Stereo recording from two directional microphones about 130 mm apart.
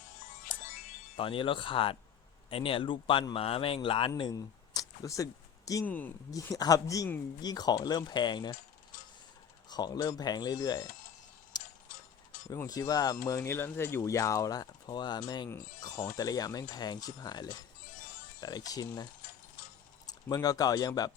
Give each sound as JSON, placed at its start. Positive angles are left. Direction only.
{"t": 1.1, "sound": "speech", "side_deg": 40}
{"t": 4.2, "sound": "a sound", "side_deg": 30}
{"t": 5.8, "sound": "speech", "side_deg": 15}
{"t": 6.3, "sound": "speech", "side_deg": 25}
{"t": 9.6, "sound": "speech", "side_deg": 30}
{"t": 11.5, "sound": "a sound", "side_deg": 30}
{"t": 12.5, "sound": "speech", "side_deg": 25}
{"t": 15.4, "sound": "speech", "side_deg": 20}
{"t": 20.1, "sound": "speech", "side_deg": 30}